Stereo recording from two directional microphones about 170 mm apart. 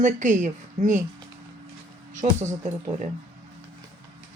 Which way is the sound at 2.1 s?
45° right (ahead or behind).